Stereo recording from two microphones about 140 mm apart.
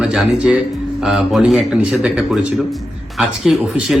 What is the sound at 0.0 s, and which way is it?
A man's voice, 5° right (ahead or behind).